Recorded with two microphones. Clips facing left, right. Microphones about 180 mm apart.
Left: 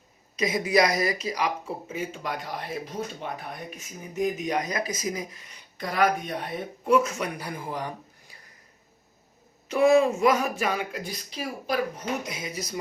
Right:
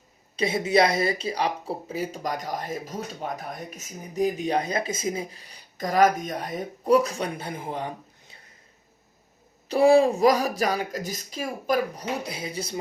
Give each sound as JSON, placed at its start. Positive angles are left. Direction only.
{"t": 0.3, "sound": "speech", "side_deg": -30}
{"t": 9.6, "sound": "speech", "side_deg": -35}